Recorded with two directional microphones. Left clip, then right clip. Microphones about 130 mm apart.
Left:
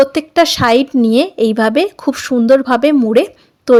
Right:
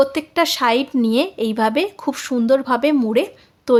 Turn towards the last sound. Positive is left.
turn(degrees=35)  # may be behind; listen again after turning